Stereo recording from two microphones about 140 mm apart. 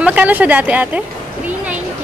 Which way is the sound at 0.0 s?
10° right (ahead or behind).